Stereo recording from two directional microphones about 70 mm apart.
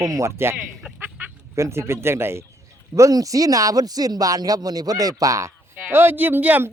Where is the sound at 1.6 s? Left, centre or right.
Right.